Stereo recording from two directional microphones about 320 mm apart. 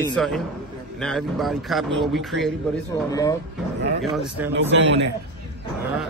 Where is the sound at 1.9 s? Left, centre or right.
Right.